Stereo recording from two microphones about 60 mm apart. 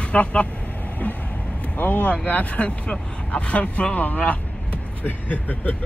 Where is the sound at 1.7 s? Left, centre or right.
Left.